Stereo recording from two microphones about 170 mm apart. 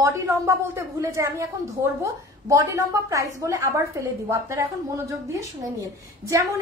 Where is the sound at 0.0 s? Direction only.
15° right (ahead or behind).